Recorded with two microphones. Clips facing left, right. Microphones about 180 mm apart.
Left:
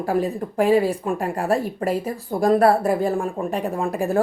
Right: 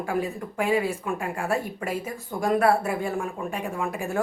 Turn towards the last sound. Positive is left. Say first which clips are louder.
# left 6 dB
turn(degrees=35)  # may be behind; listen again after turning